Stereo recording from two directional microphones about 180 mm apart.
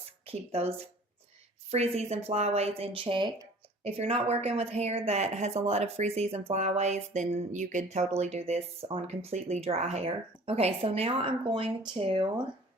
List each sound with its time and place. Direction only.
0.3 s a woman's voice: 35° right (ahead or behind)
1.7 s a woman's voice: 35° right (ahead or behind)